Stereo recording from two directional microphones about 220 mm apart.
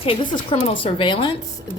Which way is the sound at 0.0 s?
25° left (ahead or behind).